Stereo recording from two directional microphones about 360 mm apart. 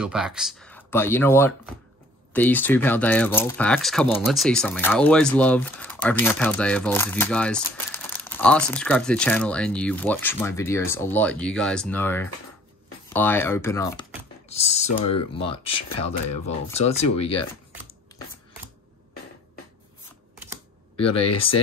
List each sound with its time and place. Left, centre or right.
0.0 s speech: centre
20.9 s speech: centre